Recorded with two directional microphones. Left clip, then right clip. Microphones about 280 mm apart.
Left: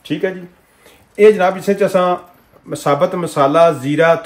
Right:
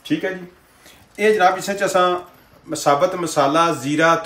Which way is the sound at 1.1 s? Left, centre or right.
Left.